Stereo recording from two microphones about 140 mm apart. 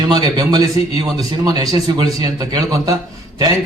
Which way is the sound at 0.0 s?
30° right (ahead or behind).